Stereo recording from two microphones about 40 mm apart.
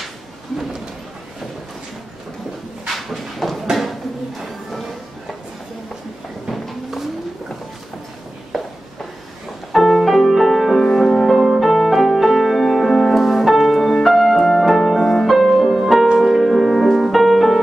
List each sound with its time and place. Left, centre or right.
3.0 s a sound: centre
8.5 s walk: centre
9.7 s music: centre